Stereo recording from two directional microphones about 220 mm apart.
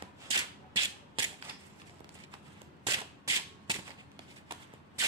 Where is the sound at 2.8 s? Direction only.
20° right (ahead or behind).